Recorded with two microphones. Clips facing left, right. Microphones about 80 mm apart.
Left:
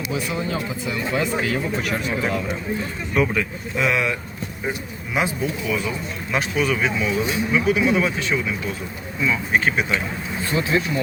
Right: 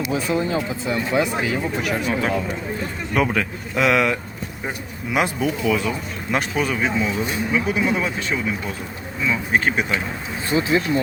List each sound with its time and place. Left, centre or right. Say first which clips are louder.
0.1 s speech: right 3 dB; right
1.2 s speech: right 1 dB; centre
3.2 s speech: even; right
5.1 s speech: right 2 dB; right
6.3 s speech: even; right
9.5 s speech: right 1 dB; right
10.5 s speech: right 3 dB; right